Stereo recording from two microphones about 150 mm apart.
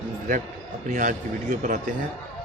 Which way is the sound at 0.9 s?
55° right (ahead or behind).